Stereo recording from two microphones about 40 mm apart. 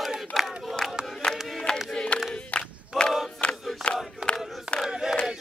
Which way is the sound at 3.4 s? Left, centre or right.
Left.